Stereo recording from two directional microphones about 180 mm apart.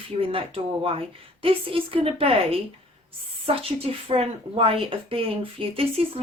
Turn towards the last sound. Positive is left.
turn(degrees=-30)  # may be behind; listen again after turning